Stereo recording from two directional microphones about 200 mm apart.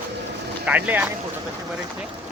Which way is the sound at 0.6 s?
5° right (ahead or behind).